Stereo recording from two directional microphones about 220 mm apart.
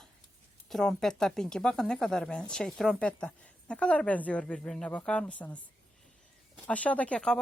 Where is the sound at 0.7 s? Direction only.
Centre (ahead or behind).